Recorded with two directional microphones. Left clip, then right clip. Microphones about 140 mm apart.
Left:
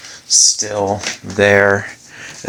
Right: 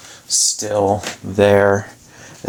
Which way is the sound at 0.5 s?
15° right (ahead or behind).